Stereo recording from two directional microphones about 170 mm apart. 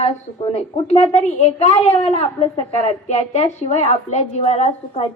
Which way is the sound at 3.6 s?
40° left (ahead or behind).